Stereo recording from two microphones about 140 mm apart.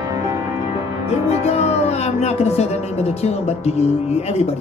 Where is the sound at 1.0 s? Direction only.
50° left (ahead or behind).